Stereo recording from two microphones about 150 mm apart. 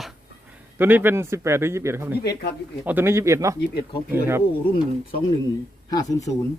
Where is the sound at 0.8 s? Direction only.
15° right (ahead or behind).